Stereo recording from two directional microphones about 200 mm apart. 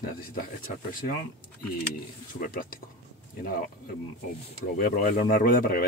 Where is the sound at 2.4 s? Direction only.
45° left (ahead or behind).